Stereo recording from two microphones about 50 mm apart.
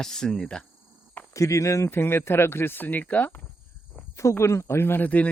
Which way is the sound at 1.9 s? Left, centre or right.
Left.